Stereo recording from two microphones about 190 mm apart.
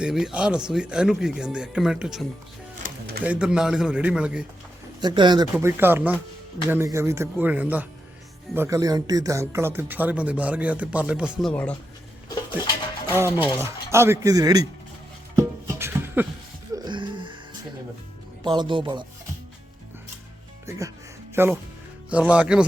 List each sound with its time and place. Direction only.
0.0 s speech: 5° right (ahead or behind)
3.2 s speech: 5° right (ahead or behind)
4.9 s speech: 25° right (ahead or behind)
5.5 s speech: 10° right (ahead or behind); by 11.8 s 5° left (ahead or behind)
13.1 s music: 10° right (ahead or behind)
13.6 s speech: 15° right (ahead or behind)
15.4 s music: 15° right (ahead or behind)
16.7 s music: 25° right (ahead or behind)
18.4 s speech: 25° right (ahead or behind)
20.7 s speech: 15° right (ahead or behind)